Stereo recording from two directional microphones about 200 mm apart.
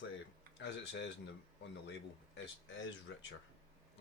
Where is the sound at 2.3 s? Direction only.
65° left (ahead or behind).